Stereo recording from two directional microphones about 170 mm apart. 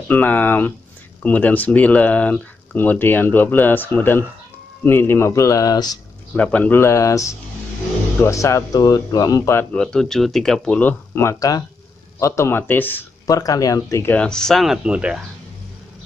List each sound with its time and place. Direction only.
0.1 s speech: 10° left (ahead or behind)
6.3 s speech: 10° left (ahead or behind)